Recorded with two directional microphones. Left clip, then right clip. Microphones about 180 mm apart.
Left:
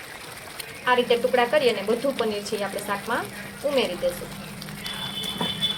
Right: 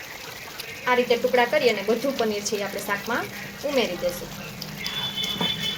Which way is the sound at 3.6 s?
25° right (ahead or behind).